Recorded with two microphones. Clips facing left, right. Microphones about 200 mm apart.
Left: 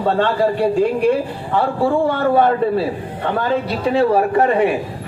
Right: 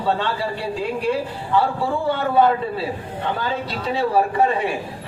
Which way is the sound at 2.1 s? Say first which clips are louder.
Left 3 dB; 55° left (ahead or behind).